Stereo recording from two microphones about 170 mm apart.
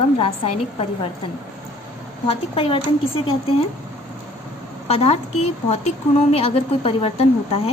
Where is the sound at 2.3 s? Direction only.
35° left (ahead or behind).